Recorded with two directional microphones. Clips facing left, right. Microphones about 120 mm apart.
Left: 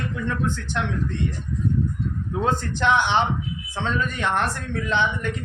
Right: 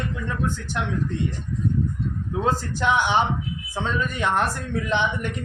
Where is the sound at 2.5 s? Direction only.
5° right (ahead or behind).